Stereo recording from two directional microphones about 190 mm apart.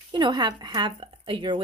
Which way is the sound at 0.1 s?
25° right (ahead or behind).